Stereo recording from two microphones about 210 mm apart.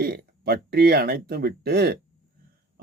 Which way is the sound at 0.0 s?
50° right (ahead or behind).